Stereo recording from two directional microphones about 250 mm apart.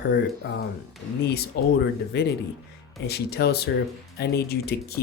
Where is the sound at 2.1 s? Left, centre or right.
Left.